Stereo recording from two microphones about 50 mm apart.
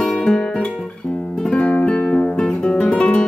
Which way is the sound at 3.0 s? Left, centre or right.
Left.